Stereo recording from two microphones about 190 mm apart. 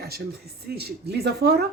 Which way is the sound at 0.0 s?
55° right (ahead or behind).